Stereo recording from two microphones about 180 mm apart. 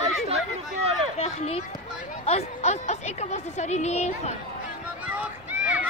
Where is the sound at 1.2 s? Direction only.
35° left (ahead or behind).